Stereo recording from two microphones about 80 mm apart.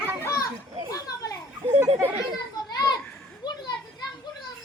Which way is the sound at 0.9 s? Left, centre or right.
Left.